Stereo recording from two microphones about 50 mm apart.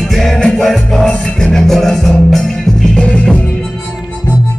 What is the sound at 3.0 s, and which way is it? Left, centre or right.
Music, left.